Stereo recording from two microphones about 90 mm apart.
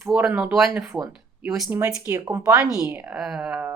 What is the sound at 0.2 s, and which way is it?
Speech, 15° right (ahead or behind).